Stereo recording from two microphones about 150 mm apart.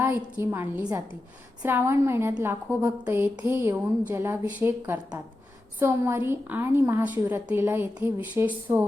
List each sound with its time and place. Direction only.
0.0 s a woman's voice: 15° right (ahead or behind)